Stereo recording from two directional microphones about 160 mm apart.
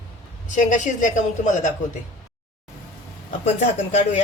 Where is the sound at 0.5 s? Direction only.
50° left (ahead or behind).